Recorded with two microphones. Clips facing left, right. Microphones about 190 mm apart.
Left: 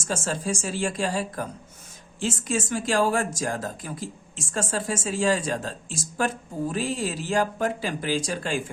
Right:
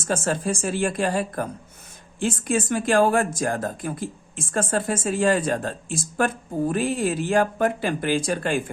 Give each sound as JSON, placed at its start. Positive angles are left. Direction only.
{"t": 0.0, "sound": "speech", "side_deg": -55}